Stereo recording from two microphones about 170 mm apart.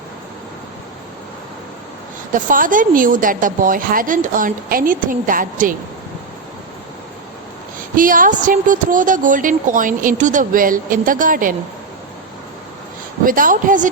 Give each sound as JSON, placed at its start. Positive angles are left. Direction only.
{"t": 2.3, "sound": "a woman's voice", "side_deg": -50}
{"t": 7.9, "sound": "a woman's voice", "side_deg": -55}
{"t": 13.2, "sound": "a woman's voice", "side_deg": -55}